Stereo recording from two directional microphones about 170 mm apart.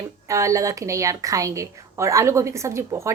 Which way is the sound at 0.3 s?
20° right (ahead or behind).